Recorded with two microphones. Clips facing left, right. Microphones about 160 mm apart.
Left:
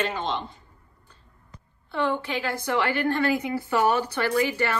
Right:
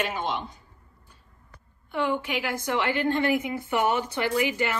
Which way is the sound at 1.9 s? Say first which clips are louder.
Left 1 dB; 15° right (ahead or behind).